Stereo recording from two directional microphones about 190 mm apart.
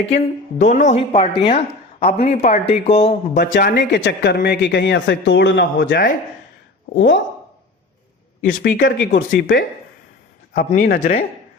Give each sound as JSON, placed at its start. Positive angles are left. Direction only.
{"t": 0.6, "sound": "speech", "side_deg": 40}
{"t": 1.1, "sound": "speech", "side_deg": 25}
{"t": 3.3, "sound": "speech", "side_deg": 55}
{"t": 6.9, "sound": "speech", "side_deg": 75}
{"t": 8.4, "sound": "speech", "side_deg": 45}